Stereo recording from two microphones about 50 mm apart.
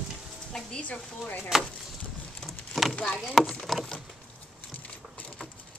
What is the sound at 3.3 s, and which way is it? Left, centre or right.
Speech, centre.